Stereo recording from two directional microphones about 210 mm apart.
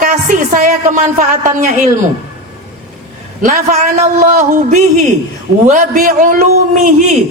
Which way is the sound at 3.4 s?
40° right (ahead or behind).